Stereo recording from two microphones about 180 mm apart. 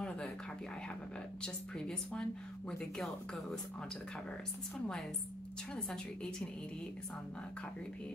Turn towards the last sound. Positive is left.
turn(degrees=5)  # may be behind; listen again after turning